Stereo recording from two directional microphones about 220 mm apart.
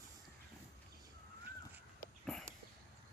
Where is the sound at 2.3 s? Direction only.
Centre (ahead or behind).